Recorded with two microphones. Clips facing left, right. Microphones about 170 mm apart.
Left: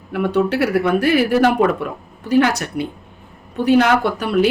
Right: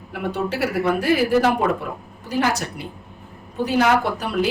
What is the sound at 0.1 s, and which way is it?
Speech, 65° left (ahead or behind).